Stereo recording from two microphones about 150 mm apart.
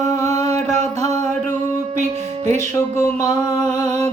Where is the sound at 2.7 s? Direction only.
20° left (ahead or behind).